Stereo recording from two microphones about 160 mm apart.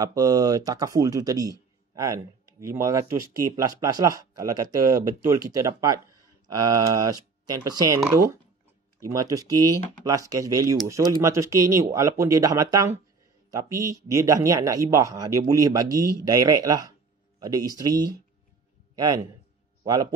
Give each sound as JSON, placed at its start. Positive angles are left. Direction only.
{"t": 0.0, "sound": "a man's voice", "side_deg": -25}